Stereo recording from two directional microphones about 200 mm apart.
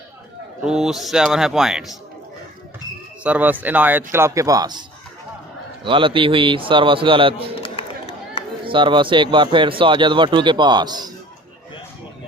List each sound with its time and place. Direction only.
0.6 s a man's voice: 5° right (ahead or behind)
3.2 s speech: 10° right (ahead or behind); by 7.4 s 25° right (ahead or behind)
7.8 s run: 30° left (ahead or behind)
8.6 s speech: 25° right (ahead or behind)